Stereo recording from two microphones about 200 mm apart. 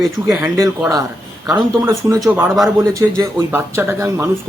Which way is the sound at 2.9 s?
15° right (ahead or behind).